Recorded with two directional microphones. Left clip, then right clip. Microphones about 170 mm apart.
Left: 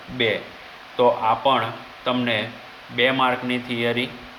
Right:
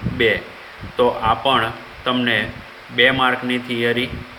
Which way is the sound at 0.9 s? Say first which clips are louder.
Right 1 dB; 25° right (ahead or behind).